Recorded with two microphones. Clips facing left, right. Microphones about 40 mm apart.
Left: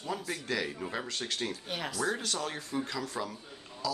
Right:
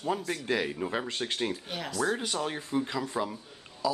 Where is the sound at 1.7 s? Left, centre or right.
Centre.